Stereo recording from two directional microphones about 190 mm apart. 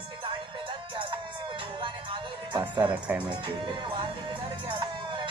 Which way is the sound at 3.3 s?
25° right (ahead or behind).